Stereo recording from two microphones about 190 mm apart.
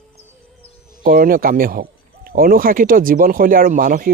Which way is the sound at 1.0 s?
50° right (ahead or behind).